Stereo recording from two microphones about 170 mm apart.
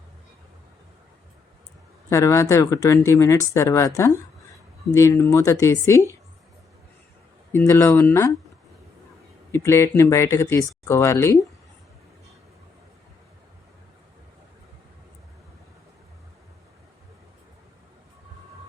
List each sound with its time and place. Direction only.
2.0 s speech: 15° left (ahead or behind)
7.5 s speech: 15° left (ahead or behind)
9.5 s speech: 15° left (ahead or behind)